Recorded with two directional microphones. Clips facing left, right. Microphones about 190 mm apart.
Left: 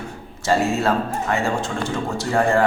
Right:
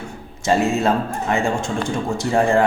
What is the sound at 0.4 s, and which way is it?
A man's voice, 20° right (ahead or behind).